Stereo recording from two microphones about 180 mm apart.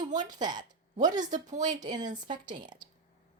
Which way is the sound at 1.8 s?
20° right (ahead or behind).